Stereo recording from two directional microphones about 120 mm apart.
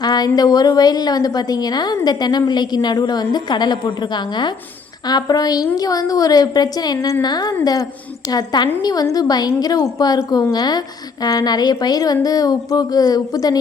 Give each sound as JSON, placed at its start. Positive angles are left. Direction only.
{"t": 0.0, "sound": "a woman's voice", "side_deg": 35}